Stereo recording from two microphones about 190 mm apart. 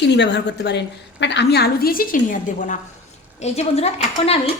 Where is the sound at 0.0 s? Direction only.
65° left (ahead or behind); by 4.4 s 30° left (ahead or behind).